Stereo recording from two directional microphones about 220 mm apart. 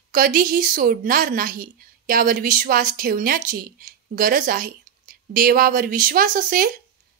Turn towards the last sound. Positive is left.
turn(degrees=-40)  # may be behind; listen again after turning